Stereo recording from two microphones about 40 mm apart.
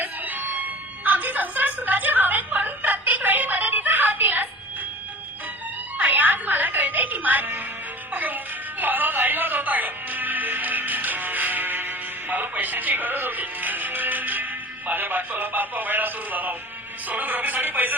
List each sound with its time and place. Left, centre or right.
0.0 s a sound: right
6.0 s music: right
14.8 s a man's voice: right